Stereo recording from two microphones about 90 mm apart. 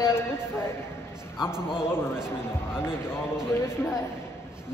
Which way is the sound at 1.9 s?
25° left (ahead or behind).